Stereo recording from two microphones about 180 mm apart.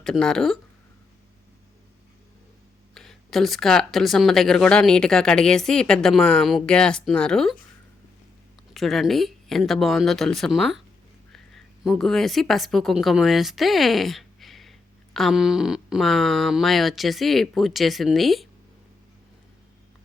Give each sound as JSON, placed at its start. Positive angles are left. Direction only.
{"t": 0.0, "sound": "speech", "side_deg": 5}
{"t": 2.9, "sound": "speech", "side_deg": 0}
{"t": 8.7, "sound": "a woman's voice", "side_deg": 0}